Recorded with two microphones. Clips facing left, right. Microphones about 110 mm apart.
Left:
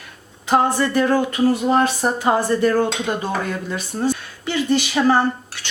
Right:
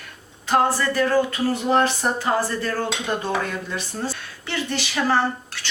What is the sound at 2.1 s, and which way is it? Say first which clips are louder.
Speech: left 5 dB; 20° left (ahead or behind).